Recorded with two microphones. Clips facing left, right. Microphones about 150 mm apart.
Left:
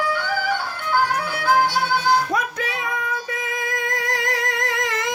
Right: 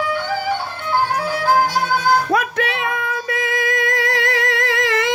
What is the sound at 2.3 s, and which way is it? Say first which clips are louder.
Music: right 5 dB; 70° right (ahead or behind).